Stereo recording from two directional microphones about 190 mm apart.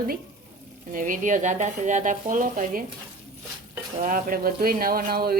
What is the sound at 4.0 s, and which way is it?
Speech, 45° right (ahead or behind).